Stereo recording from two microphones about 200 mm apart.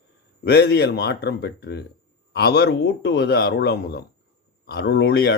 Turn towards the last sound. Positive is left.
turn(degrees=55)  # may be behind; listen again after turning